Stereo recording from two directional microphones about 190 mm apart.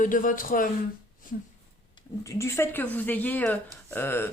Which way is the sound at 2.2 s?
15° left (ahead or behind).